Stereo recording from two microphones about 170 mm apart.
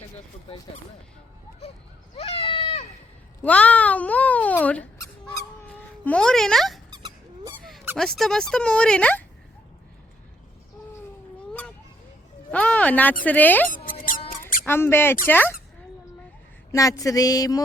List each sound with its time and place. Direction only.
2.1 s a sound: 35° left (ahead or behind)
3.4 s speech: 10° left (ahead or behind)
5.2 s goose: 10° left (ahead or behind)
6.9 s squeak: 25° right (ahead or behind)
7.9 s speech: centre (ahead or behind)
12.5 s speech: 10° left (ahead or behind)
13.7 s a sound: 55° left (ahead or behind)
14.6 s speech: 15° left (ahead or behind)
16.7 s a sound: 20° left (ahead or behind)